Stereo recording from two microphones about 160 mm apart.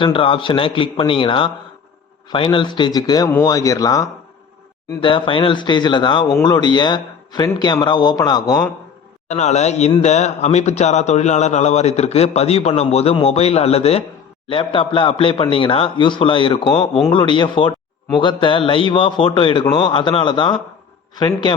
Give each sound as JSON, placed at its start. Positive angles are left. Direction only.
{"t": 0.0, "sound": "a man's voice", "side_deg": 35}
{"t": 4.9, "sound": "a man's voice", "side_deg": 30}
{"t": 9.3, "sound": "a man's voice", "side_deg": 45}
{"t": 16.7, "sound": "a man's voice", "side_deg": 5}
{"t": 17.1, "sound": "a man's voice", "side_deg": 30}